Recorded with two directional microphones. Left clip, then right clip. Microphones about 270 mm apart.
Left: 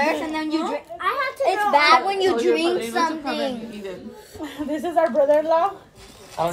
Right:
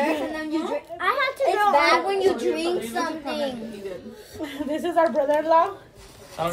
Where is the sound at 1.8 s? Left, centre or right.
Left.